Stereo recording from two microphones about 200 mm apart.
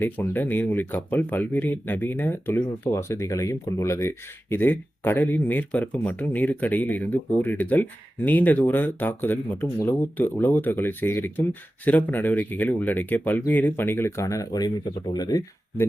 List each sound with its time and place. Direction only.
0.0 s speech: 10° left (ahead or behind)